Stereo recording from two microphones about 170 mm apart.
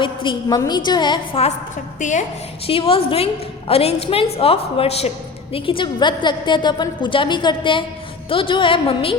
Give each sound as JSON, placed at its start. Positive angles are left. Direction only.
{"t": 0.0, "sound": "a woman's voice", "side_deg": 30}
{"t": 2.0, "sound": "speech", "side_deg": 45}
{"t": 2.6, "sound": "a woman's voice", "side_deg": 35}